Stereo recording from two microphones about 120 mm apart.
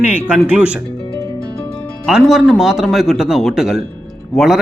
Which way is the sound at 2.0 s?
Centre (ahead or behind).